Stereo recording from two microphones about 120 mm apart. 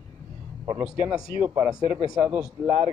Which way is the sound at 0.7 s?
15° right (ahead or behind).